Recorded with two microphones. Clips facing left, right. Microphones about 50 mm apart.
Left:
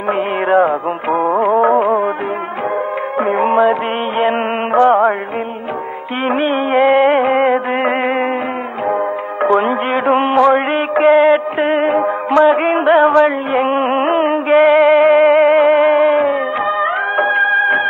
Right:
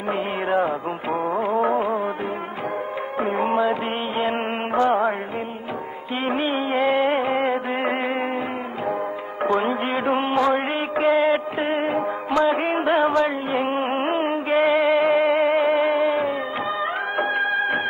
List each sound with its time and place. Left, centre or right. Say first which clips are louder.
0.1 s music: left 9 dB; left
3.2 s music: left 8 dB; left
6.2 s music: left 8 dB; left
9.4 s music: left 7 dB; left